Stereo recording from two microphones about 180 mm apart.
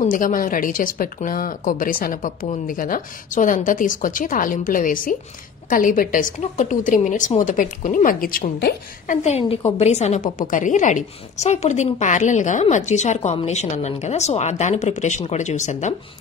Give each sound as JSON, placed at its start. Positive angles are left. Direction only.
{"t": 0.0, "sound": "a woman's voice", "side_deg": 45}
{"t": 9.0, "sound": "a woman's voice", "side_deg": 40}